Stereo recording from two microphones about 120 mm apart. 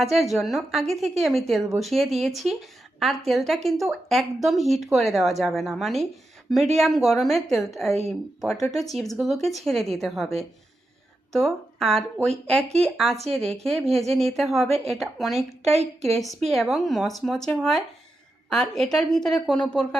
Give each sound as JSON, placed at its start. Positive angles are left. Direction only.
{"t": 0.0, "sound": "speech", "side_deg": 0}
{"t": 8.4, "sound": "speech", "side_deg": 25}
{"t": 8.7, "sound": "speech", "side_deg": 0}
{"t": 15.6, "sound": "a woman's voice", "side_deg": -65}
{"t": 16.5, "sound": "speech", "side_deg": 0}